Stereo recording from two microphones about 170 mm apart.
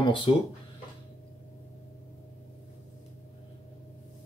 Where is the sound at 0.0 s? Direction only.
30° left (ahead or behind).